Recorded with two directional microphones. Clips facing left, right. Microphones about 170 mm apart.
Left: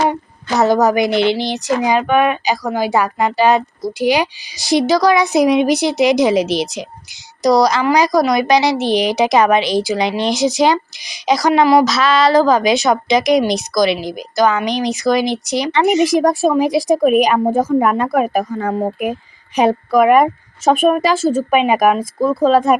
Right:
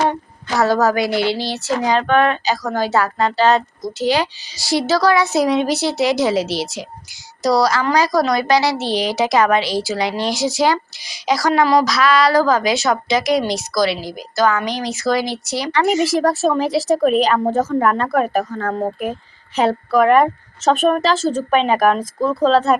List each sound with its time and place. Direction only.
0.1 s a woman's voice: 20° left (ahead or behind)